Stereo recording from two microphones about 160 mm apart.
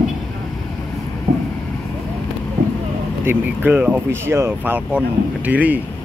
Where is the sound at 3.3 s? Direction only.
10° right (ahead or behind).